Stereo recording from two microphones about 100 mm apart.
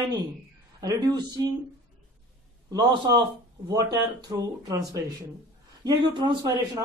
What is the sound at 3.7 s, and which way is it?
Speech, 35° right (ahead or behind).